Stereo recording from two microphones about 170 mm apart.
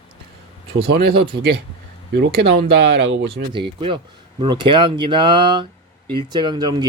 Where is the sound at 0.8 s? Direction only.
70° right (ahead or behind).